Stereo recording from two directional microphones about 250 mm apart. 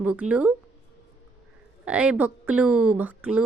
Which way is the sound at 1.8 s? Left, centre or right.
Centre.